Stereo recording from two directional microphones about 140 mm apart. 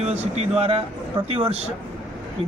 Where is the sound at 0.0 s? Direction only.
50° right (ahead or behind).